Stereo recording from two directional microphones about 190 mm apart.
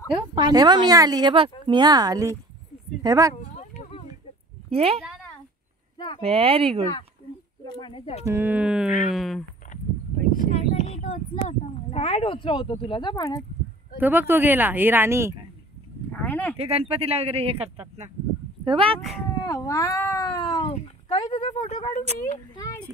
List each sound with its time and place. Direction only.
0.1 s speech: 25° right (ahead or behind)
3.3 s a sound: 40° left (ahead or behind)
4.6 s a woman's voice: 30° right (ahead or behind)
5.9 s a sound: 25° left (ahead or behind)
6.2 s speech: 30° right (ahead or behind)
7.6 s speech: 25° left (ahead or behind)
8.3 s speech: 10° right (ahead or behind)
10.3 s speech: 40° right (ahead or behind)
10.7 s speech: 35° left (ahead or behind); by 13.4 s 20° left (ahead or behind)
13.9 s speech: 10° right (ahead or behind)
16.1 s a sound: 10° left (ahead or behind)
16.5 s speech: 30° right (ahead or behind)
19.4 s speech: 15° left (ahead or behind); by 22.0 s 30° left (ahead or behind)